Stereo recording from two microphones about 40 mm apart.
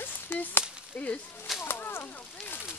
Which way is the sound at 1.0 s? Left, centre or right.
Left.